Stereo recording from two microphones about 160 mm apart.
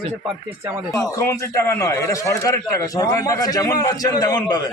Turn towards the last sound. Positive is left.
turn(degrees=25)  # may be behind; listen again after turning